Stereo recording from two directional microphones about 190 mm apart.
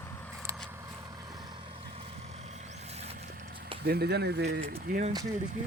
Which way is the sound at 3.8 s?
55° right (ahead or behind).